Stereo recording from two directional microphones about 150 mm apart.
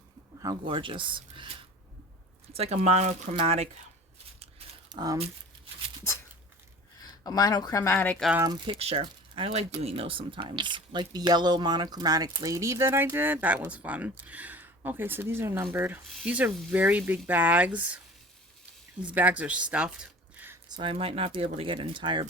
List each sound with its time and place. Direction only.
0.3 s speech: 30° right (ahead or behind); by 3.7 s 45° right (ahead or behind)
4.9 s speech: 30° right (ahead or behind)
7.0 s speech: 25° left (ahead or behind)
7.9 s speech: 10° left (ahead or behind)
8.6 s speech: 40° right (ahead or behind); by 18.0 s 10° right (ahead or behind)
19.0 s a woman's voice: 10° right (ahead or behind)
20.7 s speech: 30° right (ahead or behind)